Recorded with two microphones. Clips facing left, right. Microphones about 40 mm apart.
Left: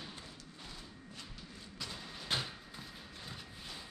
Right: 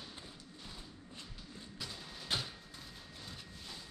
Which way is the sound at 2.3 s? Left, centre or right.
Centre.